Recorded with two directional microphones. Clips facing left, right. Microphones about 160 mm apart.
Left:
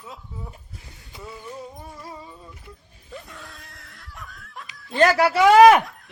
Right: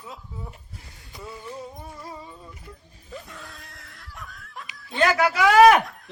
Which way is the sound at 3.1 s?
Centre (ahead or behind).